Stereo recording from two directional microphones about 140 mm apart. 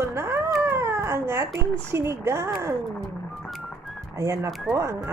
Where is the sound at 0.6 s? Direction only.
15° right (ahead or behind).